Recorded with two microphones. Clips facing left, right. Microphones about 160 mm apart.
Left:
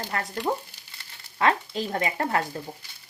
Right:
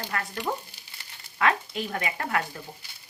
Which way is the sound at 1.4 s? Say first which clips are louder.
Left 2 dB; 30° left (ahead or behind).